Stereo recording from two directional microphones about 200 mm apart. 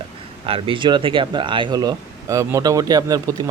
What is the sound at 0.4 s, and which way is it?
Speech, 25° right (ahead or behind).